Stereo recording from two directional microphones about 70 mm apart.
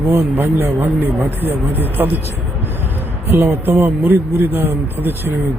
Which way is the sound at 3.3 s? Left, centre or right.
Right.